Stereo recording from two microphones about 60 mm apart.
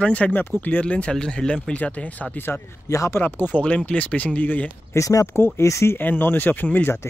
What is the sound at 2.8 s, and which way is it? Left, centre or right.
Speech, left.